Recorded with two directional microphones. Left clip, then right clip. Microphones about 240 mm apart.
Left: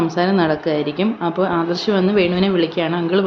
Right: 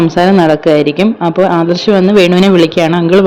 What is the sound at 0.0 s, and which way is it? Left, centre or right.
Speech, right.